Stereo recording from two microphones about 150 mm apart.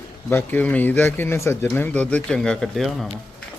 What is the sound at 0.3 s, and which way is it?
Speech, 15° left (ahead or behind).